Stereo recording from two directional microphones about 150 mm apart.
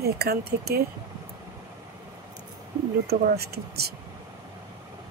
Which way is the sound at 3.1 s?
90° right.